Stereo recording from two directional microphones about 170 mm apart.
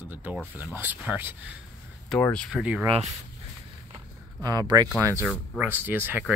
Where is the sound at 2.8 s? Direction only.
20° right (ahead or behind).